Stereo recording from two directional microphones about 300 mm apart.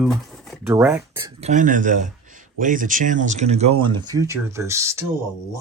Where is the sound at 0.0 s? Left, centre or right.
Centre.